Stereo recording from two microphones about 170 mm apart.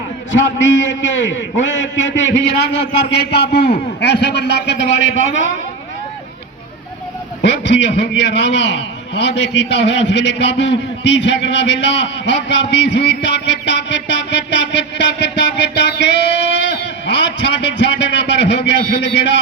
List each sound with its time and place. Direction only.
0.3 s a man's voice: 90° left
7.4 s a man's voice: 90° left